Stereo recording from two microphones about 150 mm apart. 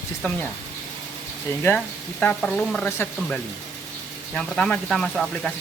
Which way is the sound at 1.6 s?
5° left (ahead or behind).